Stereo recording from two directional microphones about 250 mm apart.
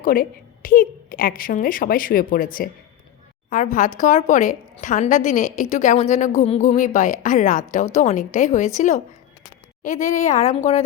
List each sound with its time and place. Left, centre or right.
0.0 s a woman's voice: left